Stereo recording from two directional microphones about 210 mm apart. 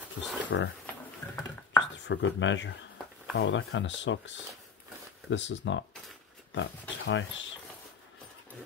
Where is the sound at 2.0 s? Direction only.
60° left (ahead or behind).